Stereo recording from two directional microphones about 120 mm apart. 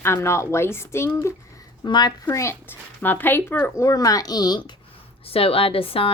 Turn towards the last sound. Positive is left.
turn(degrees=50)  # may be behind; listen again after turning